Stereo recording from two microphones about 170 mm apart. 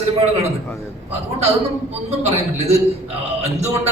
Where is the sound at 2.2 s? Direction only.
40° right (ahead or behind).